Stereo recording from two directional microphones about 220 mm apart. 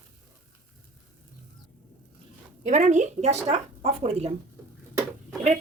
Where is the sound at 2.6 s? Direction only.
35° right (ahead or behind).